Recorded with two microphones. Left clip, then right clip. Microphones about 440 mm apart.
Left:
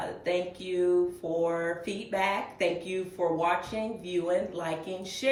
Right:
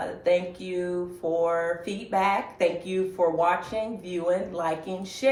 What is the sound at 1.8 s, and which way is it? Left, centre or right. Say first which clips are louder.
Speech: right 5 dB; centre.